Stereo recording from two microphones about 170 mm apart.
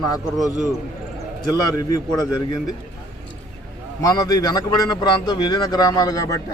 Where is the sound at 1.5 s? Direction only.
20° left (ahead or behind).